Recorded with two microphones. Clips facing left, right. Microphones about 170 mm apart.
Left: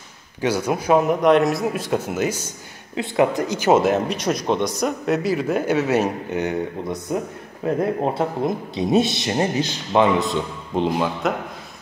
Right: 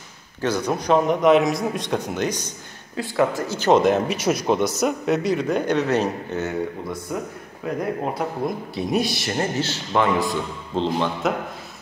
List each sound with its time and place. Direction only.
0.4 s speech: 10° left (ahead or behind)
3.0 s speech: 20° left (ahead or behind)